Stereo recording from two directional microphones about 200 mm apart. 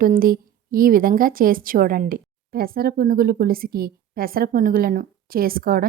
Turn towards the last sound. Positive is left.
turn(degrees=-45)  # may be behind; listen again after turning